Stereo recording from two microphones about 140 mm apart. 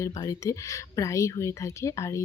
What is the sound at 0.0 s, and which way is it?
Speech, 25° left (ahead or behind).